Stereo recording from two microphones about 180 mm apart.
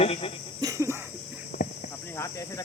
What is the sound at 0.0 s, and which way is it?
Snake, 35° left (ahead or behind).